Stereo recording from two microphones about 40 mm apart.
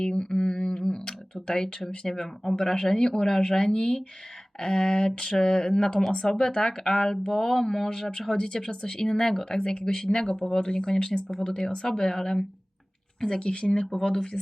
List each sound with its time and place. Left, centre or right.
0.0 s humming: centre
2.1 s speech: centre
11.9 s speech: centre
13.4 s speech: left